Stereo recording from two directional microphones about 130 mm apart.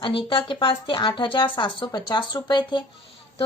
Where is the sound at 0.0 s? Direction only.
40° left (ahead or behind).